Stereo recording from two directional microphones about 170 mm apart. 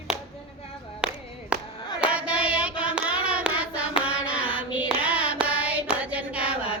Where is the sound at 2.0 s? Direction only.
5° right (ahead or behind).